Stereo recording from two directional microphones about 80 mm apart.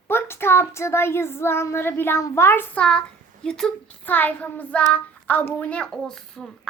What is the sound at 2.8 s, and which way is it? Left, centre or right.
Speech, centre.